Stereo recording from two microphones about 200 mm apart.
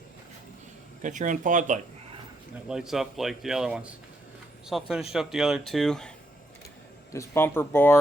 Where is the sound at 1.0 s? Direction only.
40° right (ahead or behind).